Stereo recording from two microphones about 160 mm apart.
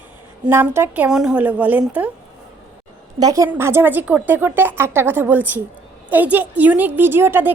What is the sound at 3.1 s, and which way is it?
A woman's voice, 20° right (ahead or behind).